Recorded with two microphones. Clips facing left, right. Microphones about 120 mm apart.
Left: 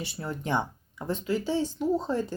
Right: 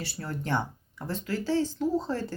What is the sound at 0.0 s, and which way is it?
Speech, 15° left (ahead or behind).